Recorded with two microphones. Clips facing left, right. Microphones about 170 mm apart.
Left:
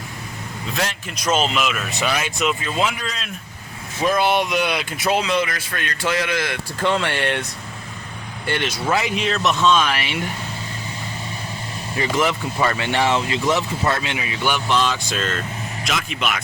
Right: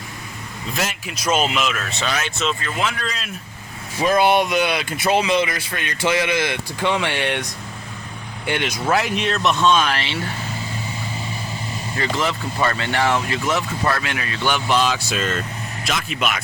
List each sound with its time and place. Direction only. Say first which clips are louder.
0.8 s speech: even; 5° right (ahead or behind)
1.6 s speech: left 1 dB; 5° left (ahead or behind)
5.5 s speech: right 1 dB; 15° right (ahead or behind)
8.4 s speech: right 1 dB; 15° right (ahead or behind)
8.9 s speech: right 1 dB; centre (ahead or behind)
10.0 s speech: left 1 dB; 15° left (ahead or behind)
11.9 s speech: left 3 dB; 15° left (ahead or behind)
14.5 s speech: right 2 dB; 5° right (ahead or behind)